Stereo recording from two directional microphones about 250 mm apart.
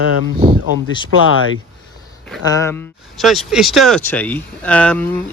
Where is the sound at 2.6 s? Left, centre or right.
Centre.